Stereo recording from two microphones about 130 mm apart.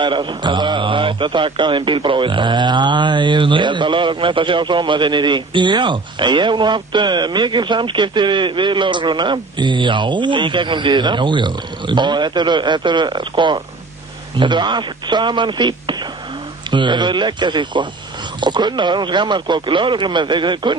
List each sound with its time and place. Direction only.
0.0 s a man's voice: 35° right (ahead or behind)